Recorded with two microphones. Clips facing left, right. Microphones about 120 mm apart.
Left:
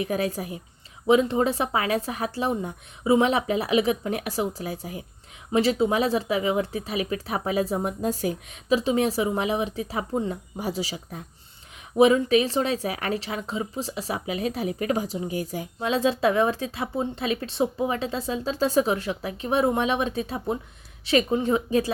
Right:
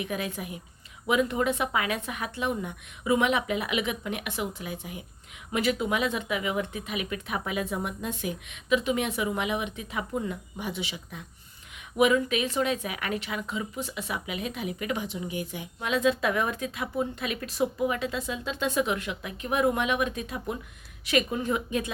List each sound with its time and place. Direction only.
0.0 s speech: 35° left (ahead or behind)